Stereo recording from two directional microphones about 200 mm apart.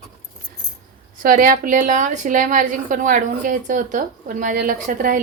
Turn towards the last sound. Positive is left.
turn(degrees=-40)  # may be behind; listen again after turning